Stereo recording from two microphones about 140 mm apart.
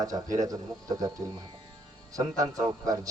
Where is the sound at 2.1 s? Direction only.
25° right (ahead or behind).